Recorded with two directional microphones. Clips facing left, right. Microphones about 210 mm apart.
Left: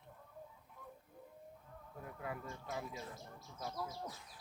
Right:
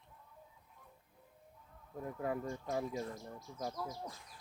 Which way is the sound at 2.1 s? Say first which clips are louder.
Right 7 dB; 40° right (ahead or behind).